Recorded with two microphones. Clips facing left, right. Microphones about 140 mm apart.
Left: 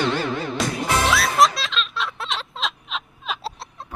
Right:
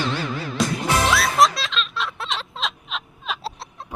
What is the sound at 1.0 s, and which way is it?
Music, centre (ahead or behind).